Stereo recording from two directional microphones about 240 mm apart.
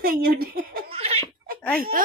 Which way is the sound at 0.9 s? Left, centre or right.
Right.